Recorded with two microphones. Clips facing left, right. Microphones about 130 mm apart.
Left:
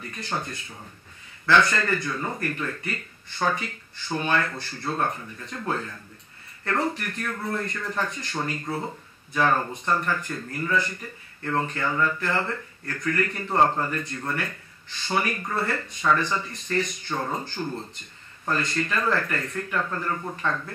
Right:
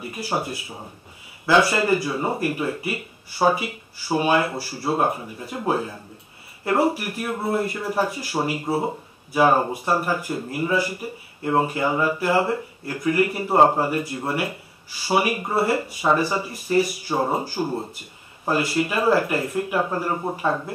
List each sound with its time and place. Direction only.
0.0 s speech: 10° right (ahead or behind)
17.6 s speech: 25° right (ahead or behind)
18.5 s speech: 10° right (ahead or behind)